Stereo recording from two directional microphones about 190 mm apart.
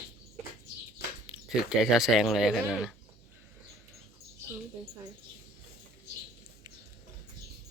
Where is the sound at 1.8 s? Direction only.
Centre (ahead or behind).